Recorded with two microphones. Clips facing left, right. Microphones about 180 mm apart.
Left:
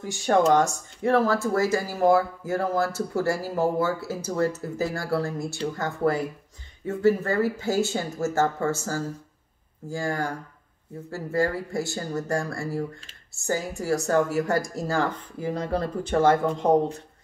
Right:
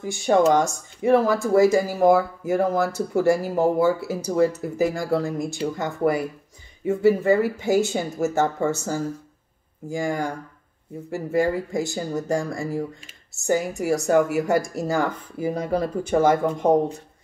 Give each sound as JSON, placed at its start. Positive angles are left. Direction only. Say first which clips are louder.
{"t": 0.0, "sound": "speech", "louder": "right 3 dB", "side_deg": -10}